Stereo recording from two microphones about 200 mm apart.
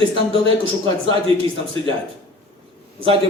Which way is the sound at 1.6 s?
30° right (ahead or behind).